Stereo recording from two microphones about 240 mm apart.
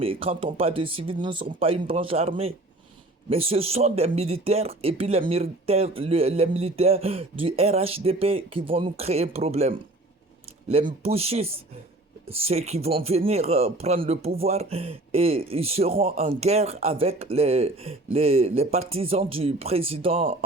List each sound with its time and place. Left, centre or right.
0.0 s speech: right